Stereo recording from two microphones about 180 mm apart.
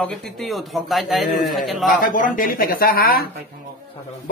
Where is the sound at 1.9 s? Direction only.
50° left (ahead or behind).